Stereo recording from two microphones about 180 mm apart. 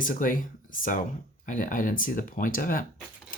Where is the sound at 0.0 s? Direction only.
50° left (ahead or behind).